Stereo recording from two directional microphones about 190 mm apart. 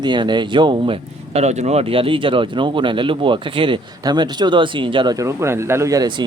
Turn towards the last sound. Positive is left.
turn(degrees=-20)  # may be behind; listen again after turning